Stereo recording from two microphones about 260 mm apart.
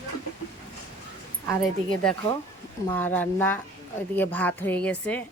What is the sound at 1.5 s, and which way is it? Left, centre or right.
Speech, centre.